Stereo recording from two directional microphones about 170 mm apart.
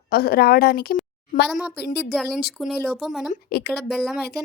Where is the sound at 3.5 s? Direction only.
70° left (ahead or behind).